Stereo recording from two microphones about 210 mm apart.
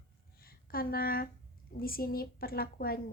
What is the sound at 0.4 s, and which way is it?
A woman's voice, 45° left (ahead or behind).